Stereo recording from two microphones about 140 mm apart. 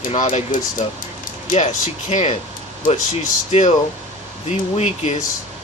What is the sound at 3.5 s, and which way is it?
Speech, 55° left (ahead or behind).